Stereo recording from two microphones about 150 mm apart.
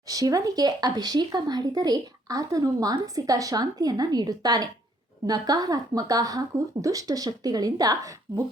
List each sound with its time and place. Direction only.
0.1 s speech: 25° right (ahead or behind)